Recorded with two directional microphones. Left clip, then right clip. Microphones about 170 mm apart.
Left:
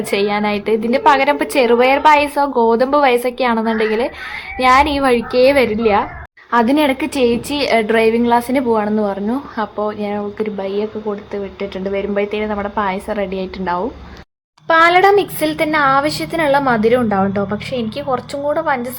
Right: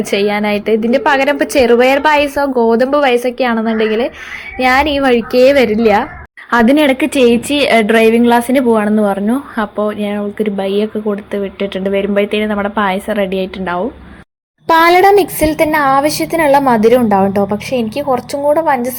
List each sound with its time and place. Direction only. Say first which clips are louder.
0.0 s a woman's voice: right 3 dB; 15° right (ahead or behind)
14.7 s speech: right 3 dB; 35° right (ahead or behind)
15.4 s a woman's voice: right 4 dB; 15° right (ahead or behind)